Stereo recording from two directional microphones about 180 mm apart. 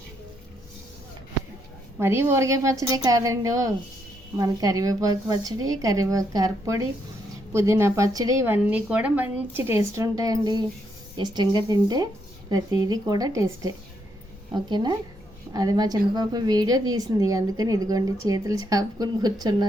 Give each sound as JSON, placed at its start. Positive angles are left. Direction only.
{"t": 2.0, "sound": "a woman's voice", "side_deg": -15}
{"t": 8.7, "sound": "a woman's voice", "side_deg": -5}